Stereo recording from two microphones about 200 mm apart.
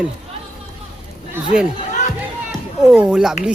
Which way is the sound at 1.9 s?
40° left (ahead or behind).